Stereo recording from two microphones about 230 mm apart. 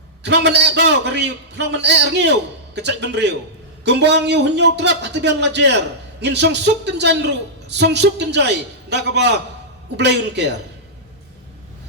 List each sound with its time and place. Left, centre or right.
0.2 s a man's voice: right